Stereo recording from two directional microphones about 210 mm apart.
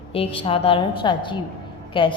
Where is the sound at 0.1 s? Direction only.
25° left (ahead or behind).